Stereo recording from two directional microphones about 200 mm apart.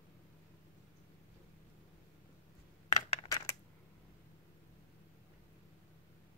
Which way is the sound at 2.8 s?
30° left (ahead or behind).